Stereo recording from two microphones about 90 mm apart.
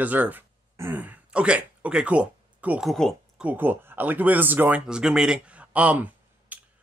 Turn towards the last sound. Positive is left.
turn(degrees=-20)  # may be behind; listen again after turning